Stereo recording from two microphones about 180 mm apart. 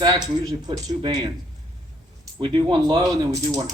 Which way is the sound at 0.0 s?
20° right (ahead or behind).